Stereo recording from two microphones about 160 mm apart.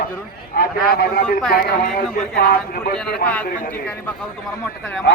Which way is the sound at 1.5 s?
65° left (ahead or behind).